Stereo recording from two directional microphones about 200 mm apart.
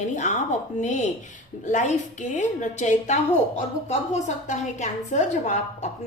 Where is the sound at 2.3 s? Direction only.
35° left (ahead or behind).